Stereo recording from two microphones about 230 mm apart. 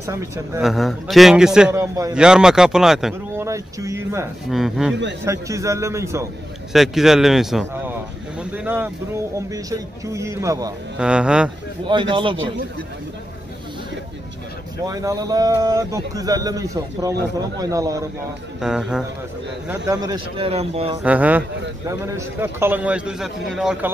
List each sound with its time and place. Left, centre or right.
0.0 s speech: centre
0.6 s a man's voice: centre
2.1 s a man's voice: centre
3.4 s speech: centre
4.5 s a man's voice: centre
5.2 s speech: centre
6.7 s a man's voice: centre
8.4 s vehicle: centre
9.5 s speech: centre
11.9 s a man's voice: right
14.9 s speech: centre
18.6 s a man's voice: centre
19.7 s a man's voice: centre
21.0 s speech: centre